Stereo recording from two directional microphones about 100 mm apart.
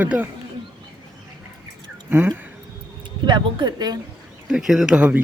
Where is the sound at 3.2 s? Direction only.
50° right (ahead or behind).